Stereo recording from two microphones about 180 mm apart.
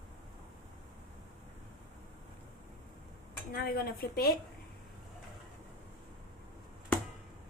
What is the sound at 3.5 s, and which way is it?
Speech, 60° left (ahead or behind).